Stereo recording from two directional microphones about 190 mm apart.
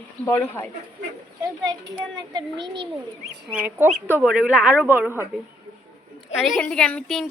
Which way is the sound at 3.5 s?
10° right (ahead or behind).